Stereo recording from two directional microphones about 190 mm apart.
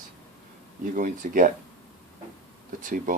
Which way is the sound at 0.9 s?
45° right (ahead or behind).